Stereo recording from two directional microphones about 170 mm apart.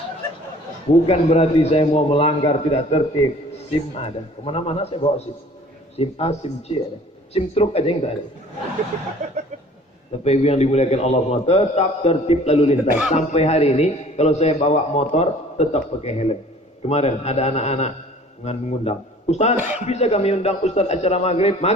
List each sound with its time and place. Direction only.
1.0 s a man's voice: 35° left (ahead or behind)
9.2 s a sound: 40° right (ahead or behind)
10.2 s a man's voice: 40° left (ahead or behind)